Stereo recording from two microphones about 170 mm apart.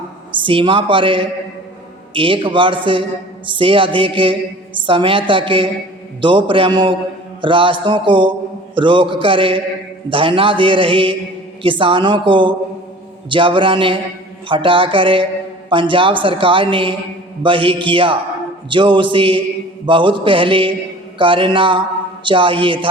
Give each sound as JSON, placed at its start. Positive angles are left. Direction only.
{"t": 0.3, "sound": "a man's voice", "side_deg": -30}